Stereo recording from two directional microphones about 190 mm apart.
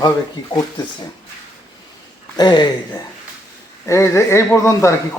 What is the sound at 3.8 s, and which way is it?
Speech, 15° left (ahead or behind).